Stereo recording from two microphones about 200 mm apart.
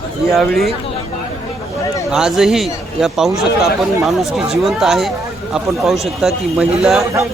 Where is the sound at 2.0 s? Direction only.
5° right (ahead or behind).